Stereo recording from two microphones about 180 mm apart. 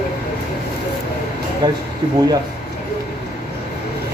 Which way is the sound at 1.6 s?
20° right (ahead or behind).